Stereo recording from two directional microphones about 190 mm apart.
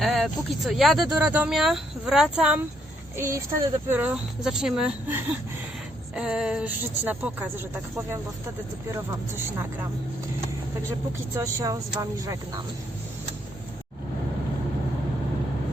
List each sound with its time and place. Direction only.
0.0 s speech: centre (ahead or behind)
3.2 s speech: 15° right (ahead or behind)
11.3 s speech: 15° right (ahead or behind)